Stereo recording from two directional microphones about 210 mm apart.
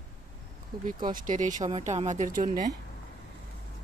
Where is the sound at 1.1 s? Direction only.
35° right (ahead or behind).